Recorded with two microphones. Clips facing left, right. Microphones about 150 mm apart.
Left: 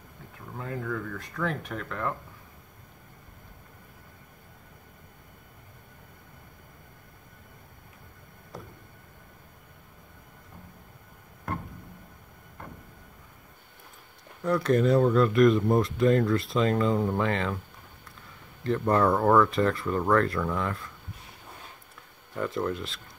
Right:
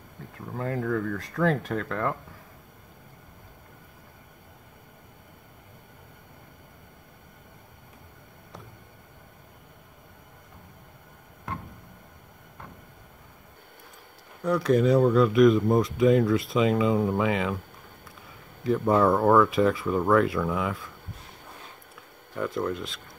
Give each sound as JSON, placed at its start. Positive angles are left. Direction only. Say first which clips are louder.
{"t": 0.7, "sound": "speech", "louder": "right 5 dB", "side_deg": -45}
{"t": 14.4, "sound": "speech", "louder": "right 1 dB", "side_deg": 0}
{"t": 18.6, "sound": "speech", "louder": "right 2 dB", "side_deg": -5}
{"t": 22.3, "sound": "speech", "louder": "right 1 dB", "side_deg": 0}